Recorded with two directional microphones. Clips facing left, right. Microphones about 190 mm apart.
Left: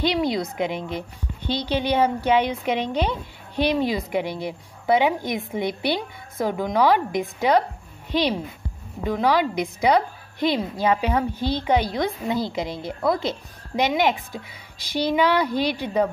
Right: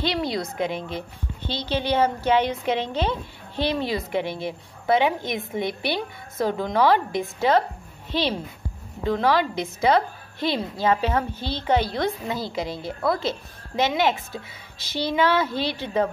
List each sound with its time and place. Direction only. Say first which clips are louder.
0.0 s a woman's voice: left 3 dB; 15° left (ahead or behind)